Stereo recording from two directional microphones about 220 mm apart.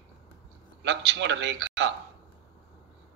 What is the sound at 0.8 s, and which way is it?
A man's voice, 55° right (ahead or behind).